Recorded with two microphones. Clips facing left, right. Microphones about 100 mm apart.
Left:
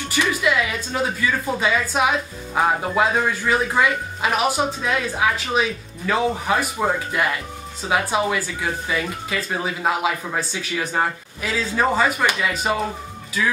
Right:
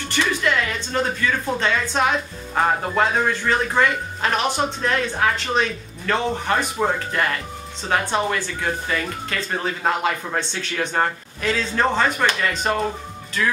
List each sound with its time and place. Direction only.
0.1 s speech: 5° left (ahead or behind)